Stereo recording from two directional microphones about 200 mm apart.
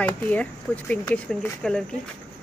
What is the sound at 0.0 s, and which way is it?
Speech, 5° left (ahead or behind).